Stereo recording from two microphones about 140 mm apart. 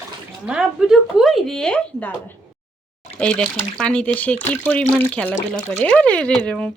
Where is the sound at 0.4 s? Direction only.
5° right (ahead or behind).